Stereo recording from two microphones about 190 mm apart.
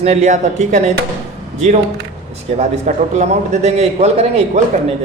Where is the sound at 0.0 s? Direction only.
35° right (ahead or behind).